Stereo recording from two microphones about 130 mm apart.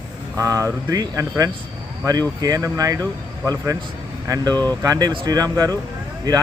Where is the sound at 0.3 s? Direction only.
25° right (ahead or behind).